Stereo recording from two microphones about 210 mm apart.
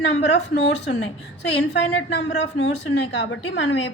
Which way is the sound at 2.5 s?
60° left (ahead or behind).